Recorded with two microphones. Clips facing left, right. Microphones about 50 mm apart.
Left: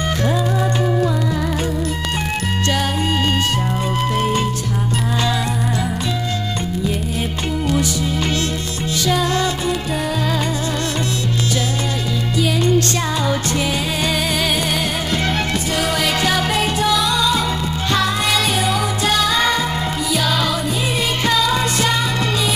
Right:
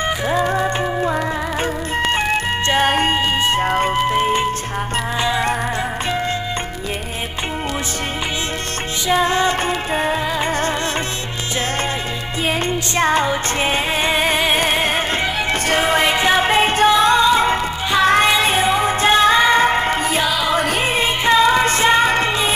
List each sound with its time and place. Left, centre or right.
0.6 s music: right
4.0 s music: right
9.0 s music: right
13.0 s music: right
15.8 s music: right
21.3 s music: right